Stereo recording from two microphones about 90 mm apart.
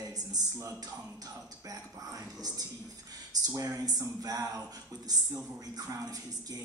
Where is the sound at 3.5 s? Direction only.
40° right (ahead or behind).